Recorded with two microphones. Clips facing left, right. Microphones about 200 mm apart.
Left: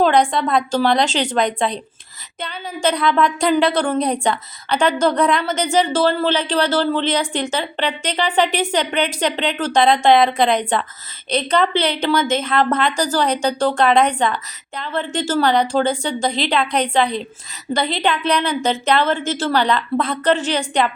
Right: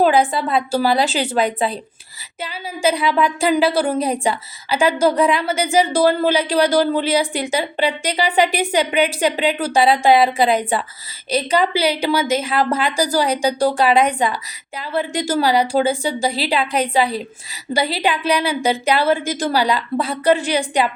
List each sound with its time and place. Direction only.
0.0 s a woman's voice: 5° right (ahead or behind)